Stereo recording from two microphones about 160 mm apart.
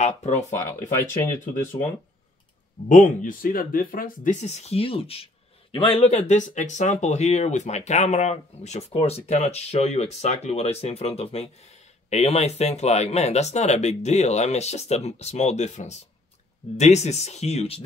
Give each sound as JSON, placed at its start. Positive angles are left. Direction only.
{"t": 0.6, "sound": "speech", "side_deg": 15}
{"t": 1.4, "sound": "speech", "side_deg": 55}
{"t": 2.9, "sound": "speech", "side_deg": 55}